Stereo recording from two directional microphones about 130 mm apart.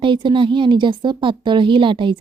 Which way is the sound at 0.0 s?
40° right (ahead or behind).